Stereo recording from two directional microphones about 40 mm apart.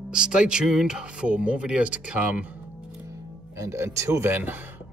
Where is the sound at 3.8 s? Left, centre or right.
Right.